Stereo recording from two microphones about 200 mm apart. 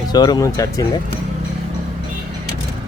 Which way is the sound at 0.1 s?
20° left (ahead or behind).